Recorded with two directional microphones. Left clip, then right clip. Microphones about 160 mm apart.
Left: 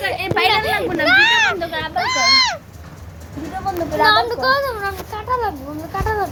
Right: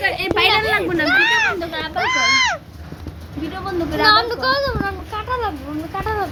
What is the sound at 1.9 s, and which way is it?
Speech, 10° right (ahead or behind).